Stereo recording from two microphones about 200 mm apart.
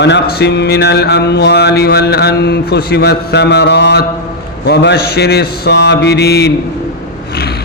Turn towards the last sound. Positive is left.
turn(degrees=50)  # may be behind; listen again after turning